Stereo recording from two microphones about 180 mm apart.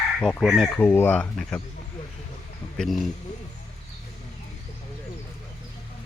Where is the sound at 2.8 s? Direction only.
Centre (ahead or behind).